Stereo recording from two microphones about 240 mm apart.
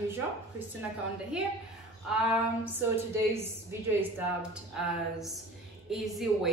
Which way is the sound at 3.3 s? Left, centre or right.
Centre.